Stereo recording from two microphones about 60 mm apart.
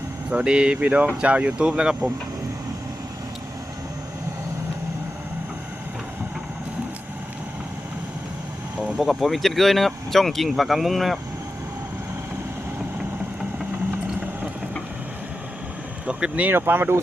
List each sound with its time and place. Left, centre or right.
0.3 s speech: centre
9.0 s speech: centre
16.0 s vehicle: right
16.6 s speech: right